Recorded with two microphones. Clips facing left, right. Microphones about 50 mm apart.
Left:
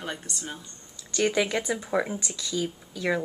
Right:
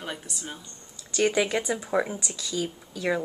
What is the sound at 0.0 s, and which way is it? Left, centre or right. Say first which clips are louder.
A woman's voice: left 1 dB; centre.